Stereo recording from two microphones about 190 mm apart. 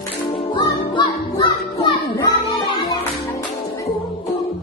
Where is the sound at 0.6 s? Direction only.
25° left (ahead or behind).